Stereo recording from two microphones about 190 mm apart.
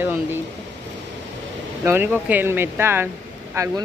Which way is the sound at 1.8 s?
10° right (ahead or behind).